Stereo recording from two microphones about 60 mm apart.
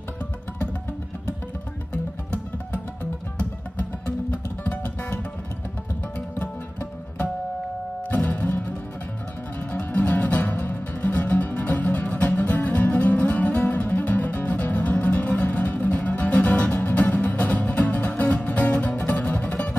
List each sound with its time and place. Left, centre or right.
2.3 s music: left
6.3 s music: left
8.3 s music: left